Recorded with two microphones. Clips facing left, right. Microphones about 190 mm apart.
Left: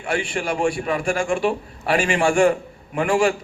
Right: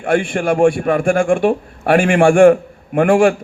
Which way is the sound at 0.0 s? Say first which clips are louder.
Right 8 dB; 50° right (ahead or behind).